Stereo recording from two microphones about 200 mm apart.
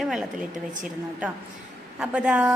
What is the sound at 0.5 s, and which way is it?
Speech, 40° right (ahead or behind).